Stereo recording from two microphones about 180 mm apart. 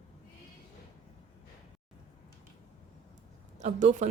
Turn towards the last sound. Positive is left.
turn(degrees=-40)  # may be behind; listen again after turning